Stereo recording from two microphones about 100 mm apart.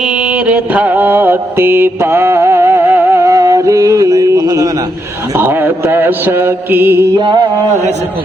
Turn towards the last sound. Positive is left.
turn(degrees=-45)  # may be behind; listen again after turning